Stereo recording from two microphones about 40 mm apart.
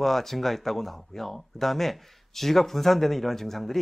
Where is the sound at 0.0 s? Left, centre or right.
Centre.